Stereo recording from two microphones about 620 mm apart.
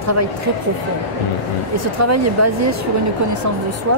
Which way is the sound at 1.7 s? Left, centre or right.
Right.